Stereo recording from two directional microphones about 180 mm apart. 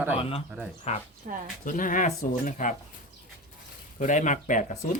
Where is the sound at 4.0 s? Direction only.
45° left (ahead or behind).